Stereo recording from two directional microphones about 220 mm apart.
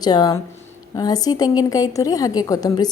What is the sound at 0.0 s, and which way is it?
A woman's voice, 20° left (ahead or behind).